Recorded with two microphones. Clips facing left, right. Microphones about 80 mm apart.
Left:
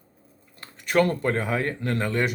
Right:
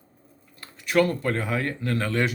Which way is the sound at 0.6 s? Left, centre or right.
Left.